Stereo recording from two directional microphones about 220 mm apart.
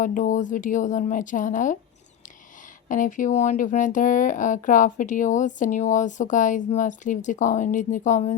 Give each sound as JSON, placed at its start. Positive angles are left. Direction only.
{"t": 0.0, "sound": "speech", "side_deg": 35}
{"t": 2.9, "sound": "speech", "side_deg": 35}